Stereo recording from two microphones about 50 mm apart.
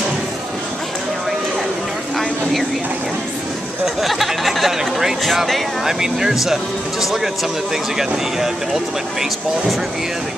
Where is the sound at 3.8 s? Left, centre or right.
Centre.